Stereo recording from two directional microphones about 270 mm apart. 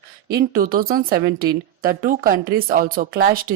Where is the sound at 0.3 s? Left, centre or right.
Right.